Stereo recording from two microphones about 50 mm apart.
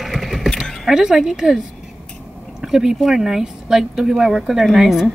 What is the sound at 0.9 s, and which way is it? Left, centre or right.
Speech, centre.